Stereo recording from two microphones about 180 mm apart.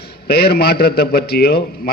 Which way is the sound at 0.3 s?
60° left (ahead or behind).